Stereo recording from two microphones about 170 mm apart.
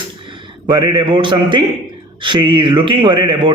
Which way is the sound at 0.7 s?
25° right (ahead or behind).